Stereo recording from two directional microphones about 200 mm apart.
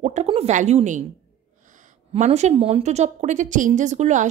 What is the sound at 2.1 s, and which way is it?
A woman's voice, 35° right (ahead or behind).